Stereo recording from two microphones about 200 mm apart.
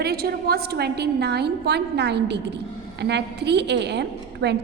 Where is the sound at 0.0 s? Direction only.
50° right (ahead or behind).